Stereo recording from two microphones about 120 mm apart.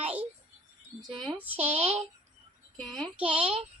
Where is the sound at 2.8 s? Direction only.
5° left (ahead or behind).